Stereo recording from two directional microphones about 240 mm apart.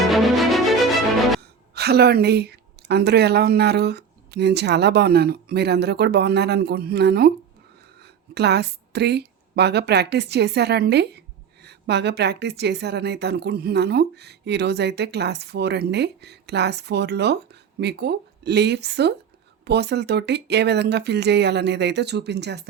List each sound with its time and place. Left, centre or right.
0.1 s music: centre
1.4 s a woman's voice: right